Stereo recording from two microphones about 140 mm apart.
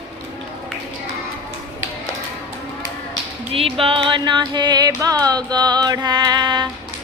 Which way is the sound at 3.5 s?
40° right (ahead or behind).